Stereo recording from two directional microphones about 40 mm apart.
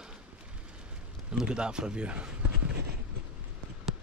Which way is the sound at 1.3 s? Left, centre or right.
Centre.